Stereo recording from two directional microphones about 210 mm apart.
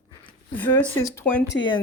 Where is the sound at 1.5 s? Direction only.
65° left (ahead or behind).